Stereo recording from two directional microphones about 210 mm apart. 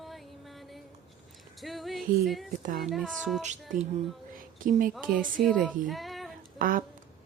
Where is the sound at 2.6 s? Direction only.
40° right (ahead or behind).